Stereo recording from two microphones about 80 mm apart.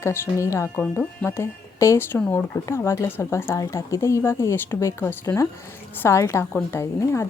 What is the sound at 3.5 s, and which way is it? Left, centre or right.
Speech, left.